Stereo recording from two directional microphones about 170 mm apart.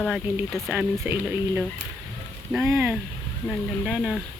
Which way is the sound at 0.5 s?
Centre (ahead or behind).